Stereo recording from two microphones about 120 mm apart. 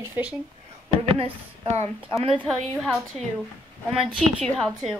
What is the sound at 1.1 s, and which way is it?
Speech, 50° right (ahead or behind).